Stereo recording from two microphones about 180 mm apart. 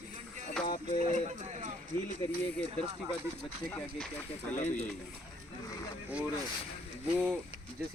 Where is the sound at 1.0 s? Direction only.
40° right (ahead or behind).